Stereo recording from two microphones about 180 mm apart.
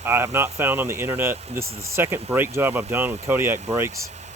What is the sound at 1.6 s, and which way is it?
Speech, 35° right (ahead or behind).